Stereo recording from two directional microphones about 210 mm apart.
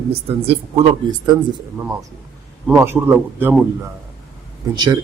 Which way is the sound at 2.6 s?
10° right (ahead or behind).